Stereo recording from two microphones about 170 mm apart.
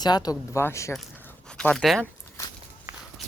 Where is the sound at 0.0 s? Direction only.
25° left (ahead or behind).